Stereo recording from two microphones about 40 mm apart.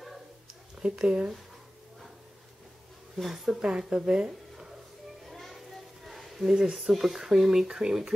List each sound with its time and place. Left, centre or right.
0.7 s speech: centre
3.4 s speech: centre
5.2 s children playing: centre
6.0 s a sound: centre
6.9 s speech: centre